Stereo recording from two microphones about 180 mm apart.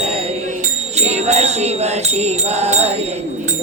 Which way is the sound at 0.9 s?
35° right (ahead or behind).